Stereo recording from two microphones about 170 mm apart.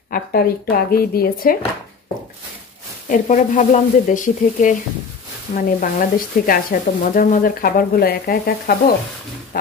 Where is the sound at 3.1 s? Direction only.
50° left (ahead or behind).